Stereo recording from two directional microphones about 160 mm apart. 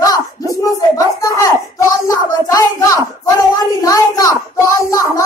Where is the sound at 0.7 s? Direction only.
20° left (ahead or behind).